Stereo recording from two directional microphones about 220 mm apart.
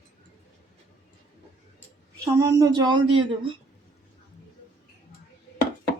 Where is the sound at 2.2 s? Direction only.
15° right (ahead or behind).